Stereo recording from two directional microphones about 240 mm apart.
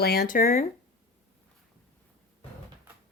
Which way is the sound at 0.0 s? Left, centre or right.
Left.